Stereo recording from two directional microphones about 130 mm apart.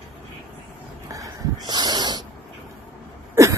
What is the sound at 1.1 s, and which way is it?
Snort, 30° right (ahead or behind).